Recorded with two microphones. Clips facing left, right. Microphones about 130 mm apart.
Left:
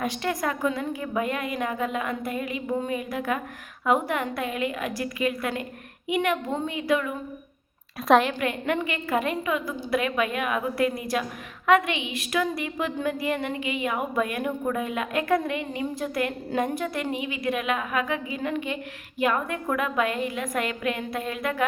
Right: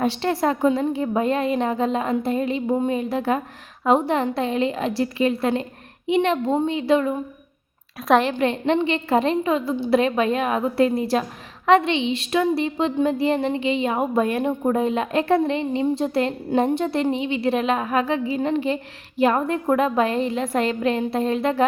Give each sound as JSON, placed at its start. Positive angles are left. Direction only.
{"t": 0.0, "sound": "a woman's voice", "side_deg": -30}
{"t": 8.0, "sound": "a woman's voice", "side_deg": 0}
{"t": 8.3, "sound": "a woman's voice", "side_deg": -30}